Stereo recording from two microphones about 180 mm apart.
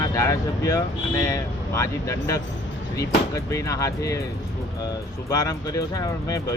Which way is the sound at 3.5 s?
15° left (ahead or behind).